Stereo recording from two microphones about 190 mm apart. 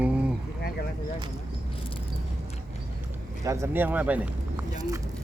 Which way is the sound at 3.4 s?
15° right (ahead or behind).